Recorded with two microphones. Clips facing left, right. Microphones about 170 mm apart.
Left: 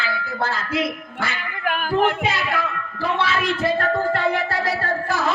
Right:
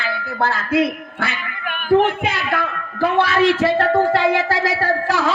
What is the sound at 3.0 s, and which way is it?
Speech, 80° right.